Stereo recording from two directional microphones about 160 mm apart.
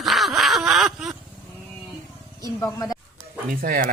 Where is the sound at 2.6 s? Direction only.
25° left (ahead or behind).